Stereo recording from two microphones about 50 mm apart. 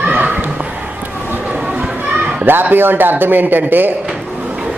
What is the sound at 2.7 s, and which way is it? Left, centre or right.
A man's voice, right.